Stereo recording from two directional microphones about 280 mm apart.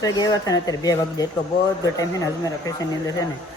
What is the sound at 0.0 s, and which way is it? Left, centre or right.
Speech, centre.